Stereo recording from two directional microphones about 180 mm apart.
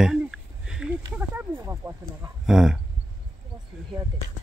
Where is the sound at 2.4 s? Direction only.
5° right (ahead or behind).